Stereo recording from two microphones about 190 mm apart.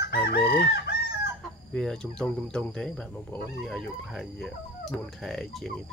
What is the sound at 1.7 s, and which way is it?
Speech, 5° left (ahead or behind).